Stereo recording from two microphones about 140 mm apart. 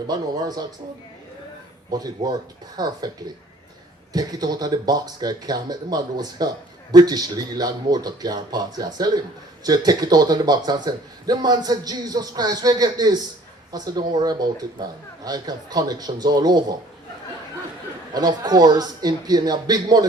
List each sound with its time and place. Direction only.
0.1 s speech: 30° right (ahead or behind)
1.9 s speech: 30° right (ahead or behind)
4.1 s speech: 30° right (ahead or behind)
18.1 s speech: 30° right (ahead or behind)